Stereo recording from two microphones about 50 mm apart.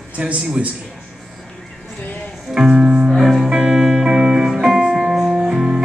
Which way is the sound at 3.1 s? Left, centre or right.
Centre.